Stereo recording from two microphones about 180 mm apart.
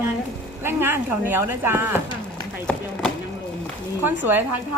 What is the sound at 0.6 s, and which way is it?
Speech, 10° right (ahead or behind).